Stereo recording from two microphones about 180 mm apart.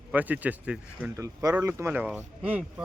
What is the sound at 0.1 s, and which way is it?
Speech, 10° right (ahead or behind).